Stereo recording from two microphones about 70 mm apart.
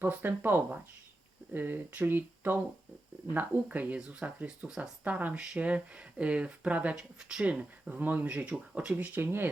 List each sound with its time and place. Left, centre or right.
0.0 s speech: right